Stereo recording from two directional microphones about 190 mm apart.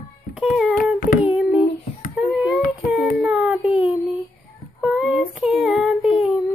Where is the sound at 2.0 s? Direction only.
45° left (ahead or behind).